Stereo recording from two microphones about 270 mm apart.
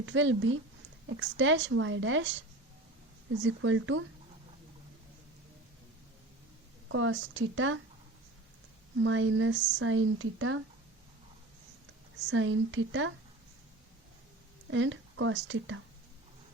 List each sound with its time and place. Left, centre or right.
0.0 s speech: right
3.4 s speech: right
6.8 s speech: right
9.0 s speech: right
12.3 s speech: right
14.7 s speech: right